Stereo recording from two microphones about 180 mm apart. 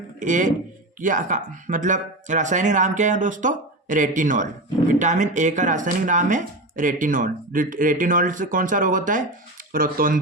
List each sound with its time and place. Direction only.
0.2 s speech: 45° right (ahead or behind)